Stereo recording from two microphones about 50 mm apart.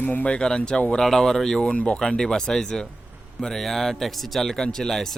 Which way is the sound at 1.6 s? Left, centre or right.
Left.